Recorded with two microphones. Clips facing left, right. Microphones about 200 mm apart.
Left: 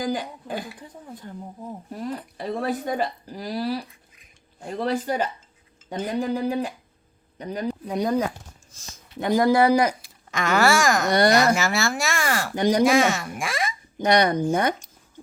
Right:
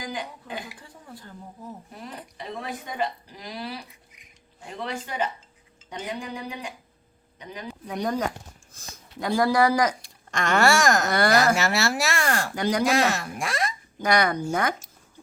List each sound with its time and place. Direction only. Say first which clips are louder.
0.0 s speech: left 7 dB; 40° left (ahead or behind)
2.5 s speech: left 9 dB; 50° left (ahead or behind)
7.9 s speech: left 3 dB; 15° left (ahead or behind)
9.2 s speech: left 3 dB; 20° left (ahead or behind)
10.0 s speech: left 1 dB; centre (ahead or behind)
11.1 s speech: left 3 dB; 25° left (ahead or behind)
11.3 s speech: left 1 dB; centre (ahead or behind)
12.5 s speech: left 6 dB; 20° left (ahead or behind)
12.8 s speech: left 3 dB; centre (ahead or behind)
14.0 s speech: left 3 dB; 25° left (ahead or behind)